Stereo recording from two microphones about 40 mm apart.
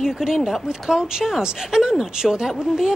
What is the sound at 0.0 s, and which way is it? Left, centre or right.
Speech, centre.